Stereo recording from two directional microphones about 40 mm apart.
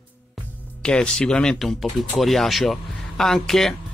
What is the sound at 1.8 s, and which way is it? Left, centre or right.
Speech, centre.